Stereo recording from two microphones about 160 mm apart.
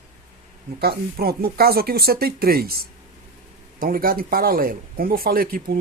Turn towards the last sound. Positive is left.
turn(degrees=-65)  # may be behind; listen again after turning